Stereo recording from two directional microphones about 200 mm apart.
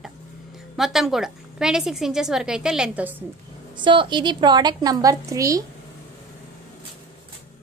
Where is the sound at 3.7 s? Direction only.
25° right (ahead or behind).